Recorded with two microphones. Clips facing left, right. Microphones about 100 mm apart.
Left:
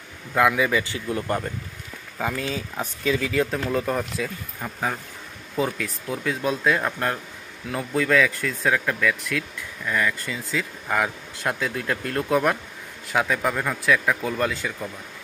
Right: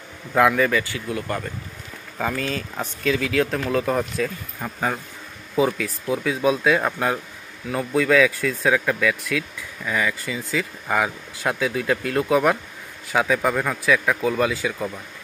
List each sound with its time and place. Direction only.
0.3 s speech: centre (ahead or behind)
0.6 s speech: 15° left (ahead or behind)
0.9 s speech: 25° left (ahead or behind)
2.1 s speech: 5° left (ahead or behind)